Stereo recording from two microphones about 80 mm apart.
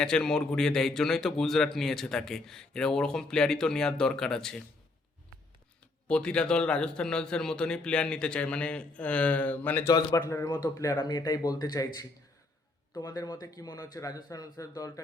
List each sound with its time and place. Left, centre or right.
0.0 s a man's voice: centre
6.1 s a man's voice: centre
10.2 s a man's voice: left
10.9 s speech: left